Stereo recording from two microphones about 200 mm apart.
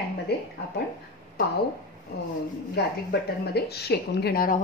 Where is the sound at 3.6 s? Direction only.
55° left (ahead or behind).